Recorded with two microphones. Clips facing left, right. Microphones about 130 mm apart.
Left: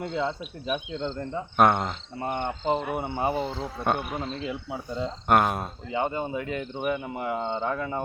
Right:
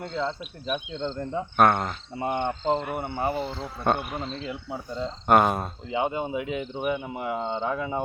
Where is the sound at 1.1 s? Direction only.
10° right (ahead or behind).